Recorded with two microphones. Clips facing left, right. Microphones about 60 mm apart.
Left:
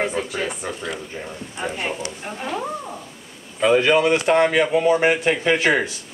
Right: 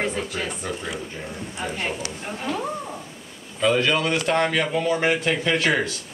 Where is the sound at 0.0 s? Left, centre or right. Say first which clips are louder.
Left 3 dB; centre.